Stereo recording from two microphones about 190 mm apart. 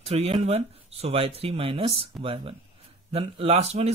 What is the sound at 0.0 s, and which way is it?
Speech, 30° right (ahead or behind).